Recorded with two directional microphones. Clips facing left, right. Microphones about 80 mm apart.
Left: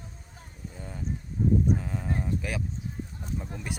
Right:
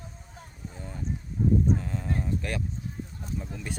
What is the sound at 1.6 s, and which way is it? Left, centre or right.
Speech, centre.